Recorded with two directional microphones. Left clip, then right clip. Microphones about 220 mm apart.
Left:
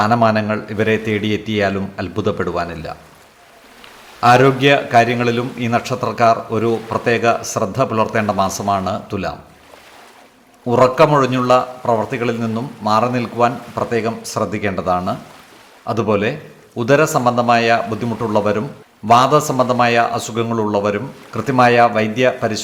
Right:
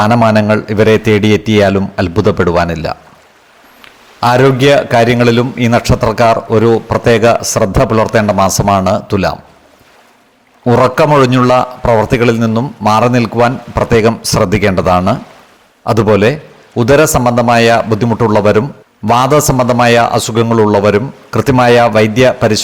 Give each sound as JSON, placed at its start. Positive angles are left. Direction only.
{"t": 0.0, "sound": "a man's voice", "side_deg": -40}
{"t": 4.2, "sound": "a man's voice", "side_deg": -40}
{"t": 10.7, "sound": "a man's voice", "side_deg": -40}